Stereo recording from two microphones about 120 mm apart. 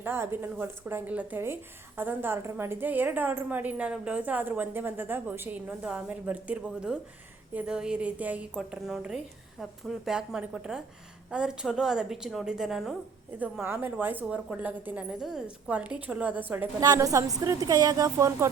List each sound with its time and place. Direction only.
0.0 s a woman's voice: 20° right (ahead or behind); by 13.0 s centre (ahead or behind)
13.4 s a woman's voice: 20° right (ahead or behind)
16.8 s a woman's voice: 30° right (ahead or behind)